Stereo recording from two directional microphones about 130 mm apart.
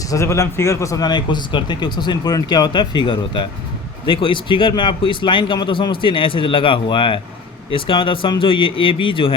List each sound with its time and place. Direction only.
0.1 s speech: 20° left (ahead or behind); by 9.3 s 40° left (ahead or behind)